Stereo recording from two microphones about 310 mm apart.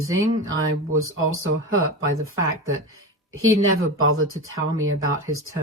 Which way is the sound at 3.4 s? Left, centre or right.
Right.